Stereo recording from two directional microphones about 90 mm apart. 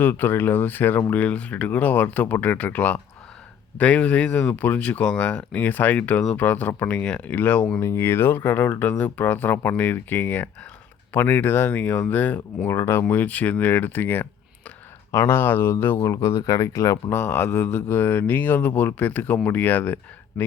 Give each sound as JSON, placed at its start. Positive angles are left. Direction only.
{"t": 0.0, "sound": "speech", "side_deg": 20}
{"t": 7.8, "sound": "speech", "side_deg": 30}
{"t": 12.6, "sound": "speech", "side_deg": 30}